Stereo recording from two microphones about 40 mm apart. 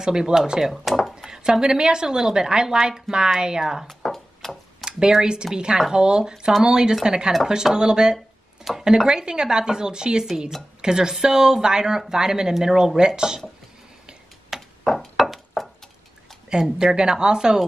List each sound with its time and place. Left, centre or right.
0.0 s speech: centre
0.8 s a sound: centre
1.3 s speech: centre
3.8 s chopping: centre
4.8 s speech: centre
14.5 s a sound: centre
16.6 s speech: centre